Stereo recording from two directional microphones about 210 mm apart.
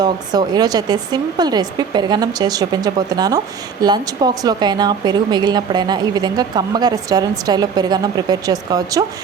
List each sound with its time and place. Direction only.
0.0 s speech: 20° right (ahead or behind)